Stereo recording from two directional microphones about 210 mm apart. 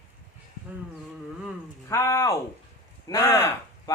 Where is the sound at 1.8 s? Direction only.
15° left (ahead or behind).